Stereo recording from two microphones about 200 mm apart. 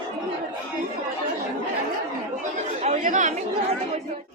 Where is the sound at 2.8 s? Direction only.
35° right (ahead or behind).